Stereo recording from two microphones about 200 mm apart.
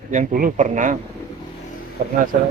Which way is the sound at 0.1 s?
40° right (ahead or behind).